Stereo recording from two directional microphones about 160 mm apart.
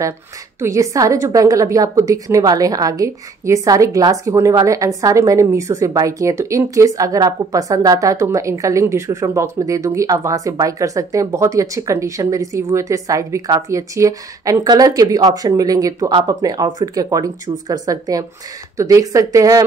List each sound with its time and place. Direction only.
0.6 s a woman's voice: 20° right (ahead or behind)